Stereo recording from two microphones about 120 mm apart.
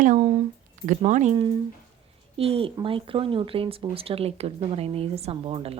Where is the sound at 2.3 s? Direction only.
55° right (ahead or behind).